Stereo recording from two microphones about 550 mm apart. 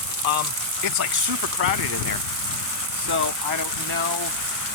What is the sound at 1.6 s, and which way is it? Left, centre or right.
Speech, right.